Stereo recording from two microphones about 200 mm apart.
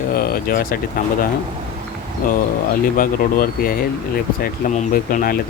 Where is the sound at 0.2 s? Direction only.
45° left (ahead or behind).